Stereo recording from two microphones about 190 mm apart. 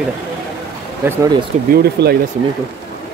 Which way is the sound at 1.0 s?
20° right (ahead or behind).